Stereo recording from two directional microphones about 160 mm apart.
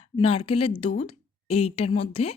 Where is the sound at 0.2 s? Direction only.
35° left (ahead or behind).